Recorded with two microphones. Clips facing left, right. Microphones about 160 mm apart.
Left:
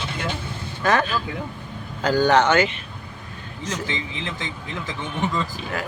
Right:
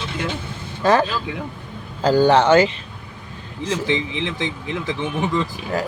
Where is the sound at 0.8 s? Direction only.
30° right (ahead or behind).